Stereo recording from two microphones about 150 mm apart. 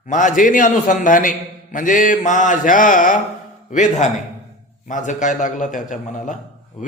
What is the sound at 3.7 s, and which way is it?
A man's voice, 50° left (ahead or behind).